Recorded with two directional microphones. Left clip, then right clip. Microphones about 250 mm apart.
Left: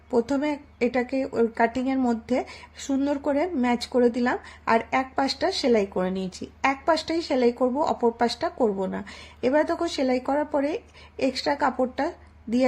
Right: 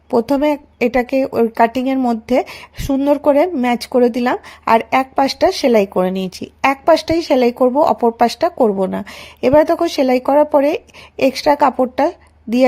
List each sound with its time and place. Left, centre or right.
0.1 s a woman's voice: right